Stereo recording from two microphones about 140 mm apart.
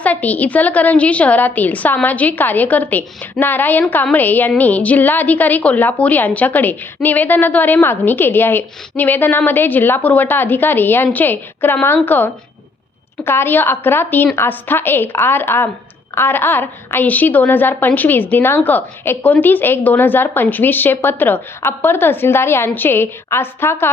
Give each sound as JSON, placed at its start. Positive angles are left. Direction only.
{"t": 0.0, "sound": "a woman's voice", "side_deg": 10}